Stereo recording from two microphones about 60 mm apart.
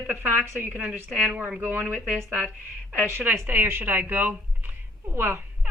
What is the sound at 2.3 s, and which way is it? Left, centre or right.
Speech, centre.